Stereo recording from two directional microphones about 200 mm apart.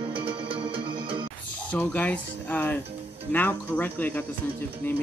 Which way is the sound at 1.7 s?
5° left (ahead or behind).